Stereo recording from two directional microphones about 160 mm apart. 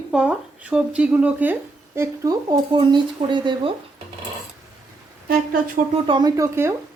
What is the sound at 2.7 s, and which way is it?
Speech, 30° right (ahead or behind).